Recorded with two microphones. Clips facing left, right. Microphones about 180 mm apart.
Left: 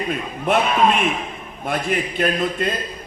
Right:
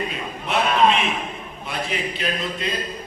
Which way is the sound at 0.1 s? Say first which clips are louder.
Left 6 dB; 50° left (ahead or behind).